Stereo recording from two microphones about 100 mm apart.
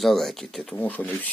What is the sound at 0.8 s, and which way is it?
Speech, 15° left (ahead or behind).